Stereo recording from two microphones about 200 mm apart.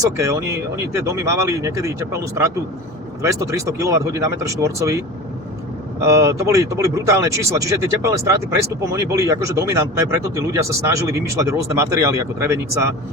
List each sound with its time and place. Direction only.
0.0 s speech: 15° right (ahead or behind)
6.0 s speech: 15° right (ahead or behind)